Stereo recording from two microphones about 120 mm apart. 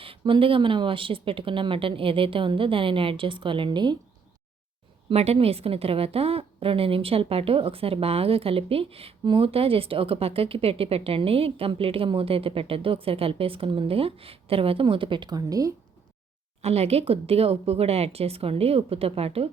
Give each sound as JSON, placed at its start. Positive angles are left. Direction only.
{"t": 0.0, "sound": "a woman's voice", "side_deg": -50}
{"t": 5.0, "sound": "a woman's voice", "side_deg": -60}
{"t": 16.6, "sound": "speech", "side_deg": -60}